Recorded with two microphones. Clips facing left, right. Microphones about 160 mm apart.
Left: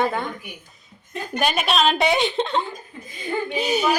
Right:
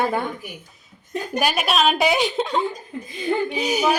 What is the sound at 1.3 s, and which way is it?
A woman's voice, 5° right (ahead or behind).